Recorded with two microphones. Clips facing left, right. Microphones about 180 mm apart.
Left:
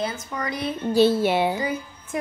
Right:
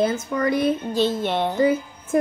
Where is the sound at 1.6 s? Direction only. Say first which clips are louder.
Right 8 dB; 50° right (ahead or behind).